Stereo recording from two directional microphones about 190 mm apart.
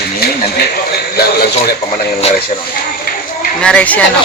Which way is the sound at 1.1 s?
55° left (ahead or behind).